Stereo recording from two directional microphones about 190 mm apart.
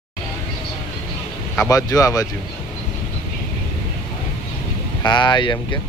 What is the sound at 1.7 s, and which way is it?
Speech, 15° left (ahead or behind).